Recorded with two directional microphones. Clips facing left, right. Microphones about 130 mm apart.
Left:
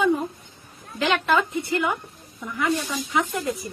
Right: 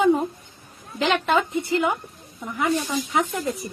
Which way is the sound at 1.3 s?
25° right (ahead or behind).